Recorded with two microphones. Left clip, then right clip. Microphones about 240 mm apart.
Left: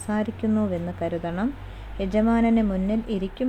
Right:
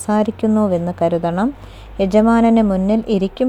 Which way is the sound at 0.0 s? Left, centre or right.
Right.